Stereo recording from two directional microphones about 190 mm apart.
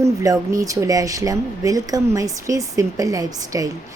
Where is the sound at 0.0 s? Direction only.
15° right (ahead or behind).